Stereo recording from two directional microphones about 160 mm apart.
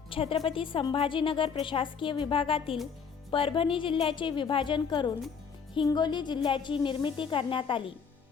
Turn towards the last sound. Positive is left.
turn(degrees=30)  # may be behind; listen again after turning